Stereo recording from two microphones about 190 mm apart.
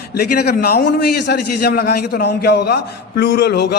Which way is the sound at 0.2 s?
55° left (ahead or behind).